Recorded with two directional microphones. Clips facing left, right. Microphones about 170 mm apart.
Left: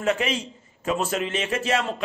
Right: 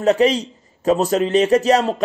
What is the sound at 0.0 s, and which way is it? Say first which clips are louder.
A man's voice: right 9 dB; 35° right (ahead or behind).